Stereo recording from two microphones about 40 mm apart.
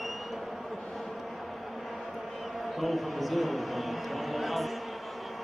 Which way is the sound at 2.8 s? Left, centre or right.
Centre.